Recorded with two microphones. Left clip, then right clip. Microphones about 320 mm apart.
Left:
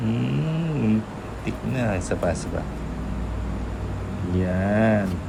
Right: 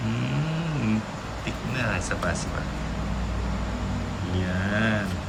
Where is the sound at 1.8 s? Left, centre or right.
Centre.